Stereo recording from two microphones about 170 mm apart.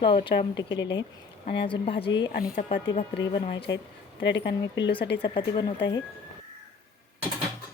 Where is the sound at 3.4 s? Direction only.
30° left (ahead or behind).